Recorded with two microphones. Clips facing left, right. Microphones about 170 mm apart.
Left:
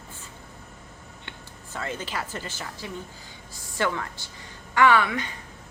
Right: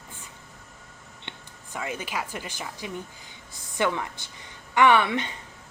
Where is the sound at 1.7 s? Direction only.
10° right (ahead or behind).